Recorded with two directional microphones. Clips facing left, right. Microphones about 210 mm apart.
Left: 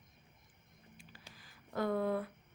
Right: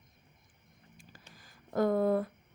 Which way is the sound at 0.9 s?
45° right (ahead or behind).